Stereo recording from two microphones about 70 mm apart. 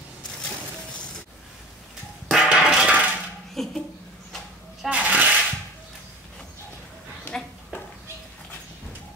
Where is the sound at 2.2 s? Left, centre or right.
Centre.